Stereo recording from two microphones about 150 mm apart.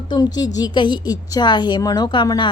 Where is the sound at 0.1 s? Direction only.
25° left (ahead or behind).